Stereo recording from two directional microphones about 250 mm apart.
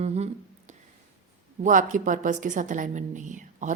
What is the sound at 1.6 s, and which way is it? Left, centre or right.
A woman's voice, right.